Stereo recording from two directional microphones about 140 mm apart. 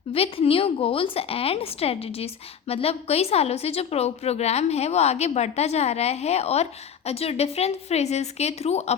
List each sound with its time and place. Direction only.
0.1 s a woman's voice: 45° left (ahead or behind)